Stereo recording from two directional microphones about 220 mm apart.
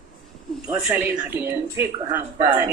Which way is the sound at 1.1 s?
10° right (ahead or behind).